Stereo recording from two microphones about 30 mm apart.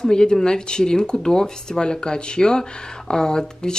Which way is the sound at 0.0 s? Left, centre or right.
Left.